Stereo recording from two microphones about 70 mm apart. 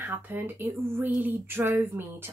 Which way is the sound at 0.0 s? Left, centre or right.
Right.